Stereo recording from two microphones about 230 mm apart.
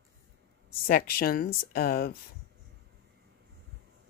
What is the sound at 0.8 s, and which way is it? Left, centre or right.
Speech, left.